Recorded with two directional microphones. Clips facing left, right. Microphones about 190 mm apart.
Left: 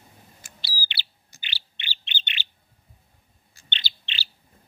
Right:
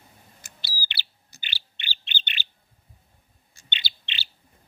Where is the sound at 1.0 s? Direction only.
45° right (ahead or behind).